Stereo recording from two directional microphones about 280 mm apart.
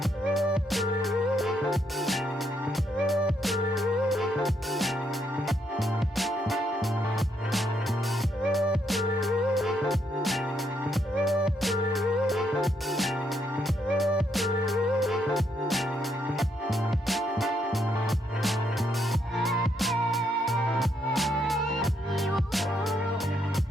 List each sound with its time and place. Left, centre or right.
0.0 s music: centre